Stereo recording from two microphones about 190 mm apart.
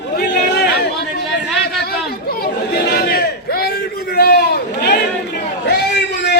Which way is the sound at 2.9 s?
55° left (ahead or behind).